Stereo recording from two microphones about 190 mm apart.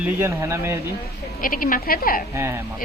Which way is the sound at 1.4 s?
45° left (ahead or behind).